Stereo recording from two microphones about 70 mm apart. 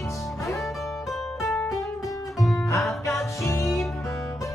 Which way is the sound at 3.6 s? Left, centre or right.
Centre.